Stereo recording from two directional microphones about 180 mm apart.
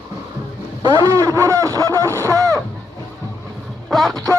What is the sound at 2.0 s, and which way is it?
Speech, 15° right (ahead or behind).